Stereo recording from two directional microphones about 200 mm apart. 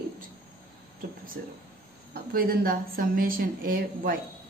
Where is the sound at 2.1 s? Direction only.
45° right (ahead or behind).